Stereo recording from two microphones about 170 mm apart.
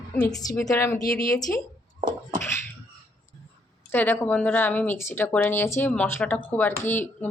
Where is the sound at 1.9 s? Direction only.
20° right (ahead or behind).